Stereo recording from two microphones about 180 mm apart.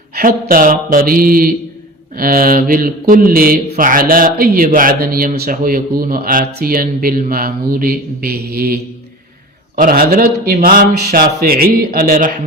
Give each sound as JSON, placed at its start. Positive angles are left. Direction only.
{"t": 0.1, "sound": "speech", "side_deg": -55}